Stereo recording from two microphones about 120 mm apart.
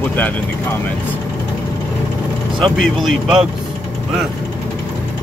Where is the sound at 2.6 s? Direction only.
5° left (ahead or behind).